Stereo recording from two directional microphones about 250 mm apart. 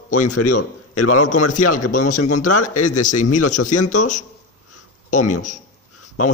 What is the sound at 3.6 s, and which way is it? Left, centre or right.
Speech, left.